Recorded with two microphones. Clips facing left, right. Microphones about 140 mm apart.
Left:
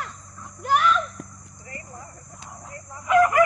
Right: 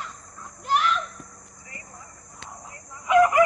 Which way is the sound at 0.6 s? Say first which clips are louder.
Left 3 dB; 50° left (ahead or behind).